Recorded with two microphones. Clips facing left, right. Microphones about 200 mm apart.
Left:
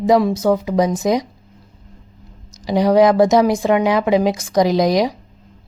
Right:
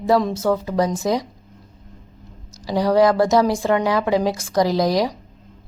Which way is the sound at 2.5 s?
20° left (ahead or behind).